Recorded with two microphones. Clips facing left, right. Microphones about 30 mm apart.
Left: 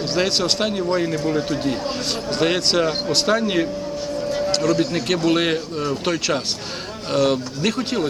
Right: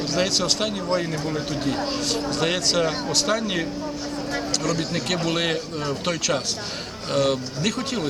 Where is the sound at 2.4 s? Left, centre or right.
Centre.